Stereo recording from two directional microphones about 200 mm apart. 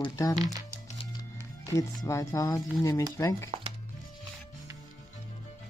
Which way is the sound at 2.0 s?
15° left (ahead or behind).